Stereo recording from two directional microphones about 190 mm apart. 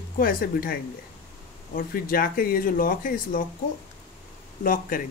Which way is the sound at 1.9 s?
50° left (ahead or behind).